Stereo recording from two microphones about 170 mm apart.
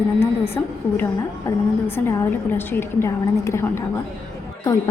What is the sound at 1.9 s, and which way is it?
A woman's voice, 15° left (ahead or behind).